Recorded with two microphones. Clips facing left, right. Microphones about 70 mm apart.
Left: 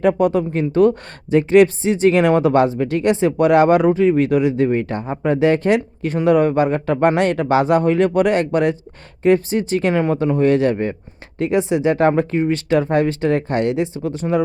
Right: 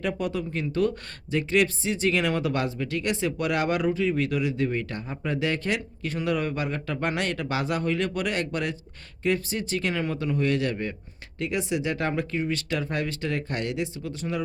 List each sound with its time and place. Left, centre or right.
0.0 s speech: left